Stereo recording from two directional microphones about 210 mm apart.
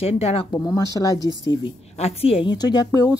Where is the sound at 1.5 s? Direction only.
25° left (ahead or behind).